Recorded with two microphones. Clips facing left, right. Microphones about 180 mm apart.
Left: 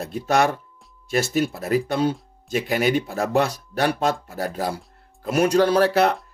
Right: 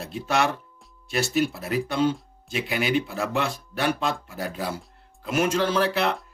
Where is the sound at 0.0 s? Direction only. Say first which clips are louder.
Left 4 dB; 45° left (ahead or behind).